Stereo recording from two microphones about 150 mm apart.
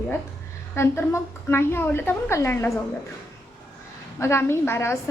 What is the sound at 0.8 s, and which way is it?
A woman's voice, 15° left (ahead or behind).